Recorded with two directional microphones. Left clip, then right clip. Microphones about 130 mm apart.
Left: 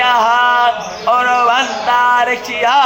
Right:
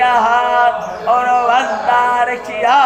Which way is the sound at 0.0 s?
25° left (ahead or behind).